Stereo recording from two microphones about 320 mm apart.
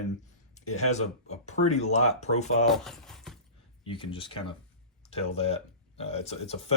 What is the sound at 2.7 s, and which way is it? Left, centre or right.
Speech, centre.